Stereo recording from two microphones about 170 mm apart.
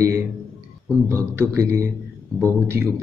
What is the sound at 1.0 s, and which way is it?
Speech, 15° right (ahead or behind).